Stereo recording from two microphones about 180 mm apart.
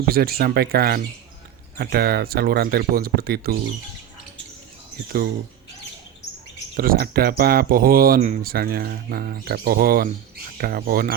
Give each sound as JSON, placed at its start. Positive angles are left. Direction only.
{"t": 0.1, "sound": "speech", "side_deg": -55}
{"t": 6.7, "sound": "speech", "side_deg": -55}